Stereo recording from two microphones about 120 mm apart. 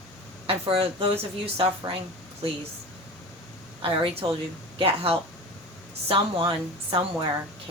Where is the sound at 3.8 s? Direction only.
50° right (ahead or behind).